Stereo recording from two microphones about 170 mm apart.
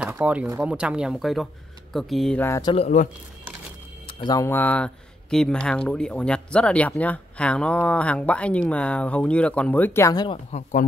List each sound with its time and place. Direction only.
0.0 s a sound: 10° right (ahead or behind)
0.6 s speech: 5° right (ahead or behind)
2.4 s speech: 15° left (ahead or behind)
2.7 s speech: 40° left (ahead or behind)
4.3 s speech: 15° left (ahead or behind)
10.5 s speech: 50° left (ahead or behind)